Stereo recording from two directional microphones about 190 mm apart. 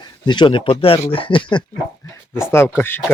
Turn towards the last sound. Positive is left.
turn(degrees=10)  # may be behind; listen again after turning